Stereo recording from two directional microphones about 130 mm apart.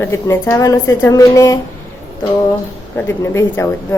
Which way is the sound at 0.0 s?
20° left (ahead or behind).